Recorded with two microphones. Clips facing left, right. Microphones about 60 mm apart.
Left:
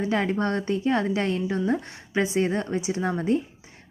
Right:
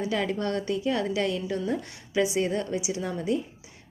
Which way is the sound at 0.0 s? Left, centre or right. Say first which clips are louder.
Left 3 dB; left.